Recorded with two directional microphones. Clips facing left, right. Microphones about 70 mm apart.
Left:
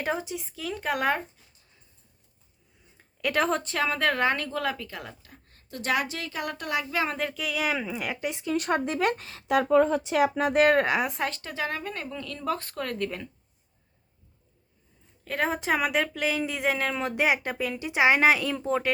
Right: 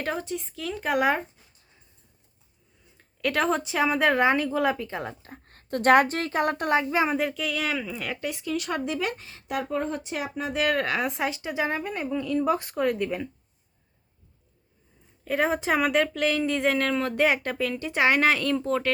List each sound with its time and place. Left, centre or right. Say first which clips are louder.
0.0 s a woman's voice: even; centre
3.0 s speech: right 1 dB; centre; by 5.3 s right
5.3 s speech: right 10 dB; right
7.1 s speech: right 4 dB; centre
8.3 s speech: even; left
8.5 s speech: left 3 dB; left
10.1 s speech: left 7 dB; left
10.5 s speech: left 3 dB; left
10.8 s speech: left 3 dB; centre
11.0 s speech: right 2 dB; centre
15.2 s speech: right 3 dB; centre